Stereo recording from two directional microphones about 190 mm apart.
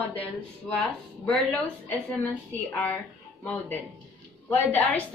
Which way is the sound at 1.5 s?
5° left (ahead or behind).